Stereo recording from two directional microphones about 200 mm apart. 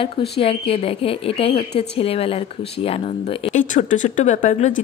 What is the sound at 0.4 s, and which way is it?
A woman's voice, 30° left (ahead or behind).